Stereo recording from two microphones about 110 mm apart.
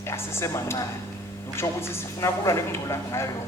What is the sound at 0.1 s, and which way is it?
Speech, 25° left (ahead or behind).